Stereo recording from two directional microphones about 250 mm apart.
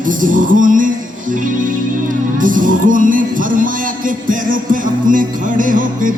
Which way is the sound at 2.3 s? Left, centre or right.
Right.